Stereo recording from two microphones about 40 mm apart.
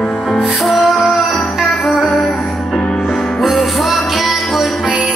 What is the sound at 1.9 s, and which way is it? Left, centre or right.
Music, centre.